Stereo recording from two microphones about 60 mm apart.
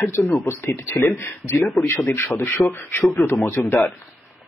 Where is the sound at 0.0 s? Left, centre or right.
Left.